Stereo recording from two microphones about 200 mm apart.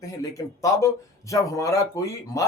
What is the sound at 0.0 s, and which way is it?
Speech, 15° left (ahead or behind).